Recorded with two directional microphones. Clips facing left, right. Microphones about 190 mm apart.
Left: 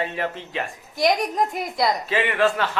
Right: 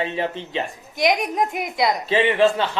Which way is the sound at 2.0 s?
25° right (ahead or behind).